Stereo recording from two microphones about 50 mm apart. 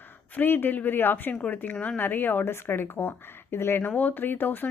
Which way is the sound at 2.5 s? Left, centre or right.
Left.